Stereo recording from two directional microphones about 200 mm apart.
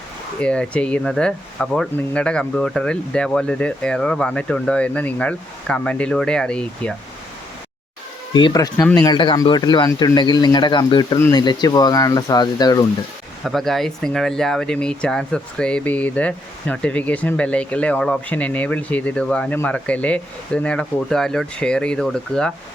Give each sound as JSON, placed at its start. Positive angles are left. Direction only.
{"t": 0.3, "sound": "speech", "side_deg": 5}
{"t": 8.3, "sound": "speech", "side_deg": 25}
{"t": 13.4, "sound": "speech", "side_deg": 0}